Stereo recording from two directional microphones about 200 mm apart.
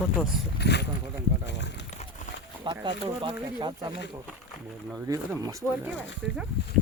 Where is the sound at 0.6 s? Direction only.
60° left (ahead or behind).